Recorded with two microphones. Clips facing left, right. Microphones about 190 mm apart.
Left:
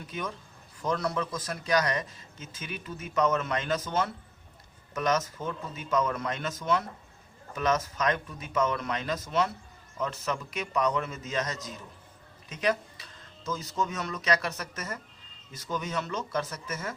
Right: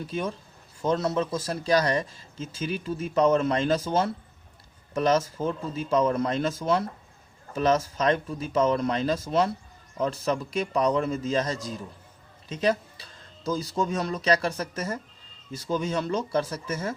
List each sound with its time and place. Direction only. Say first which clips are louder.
0.1 s speech: right 3 dB; 30° right (ahead or behind)